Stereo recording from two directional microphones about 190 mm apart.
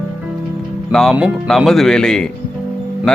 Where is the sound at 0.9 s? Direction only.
Centre (ahead or behind).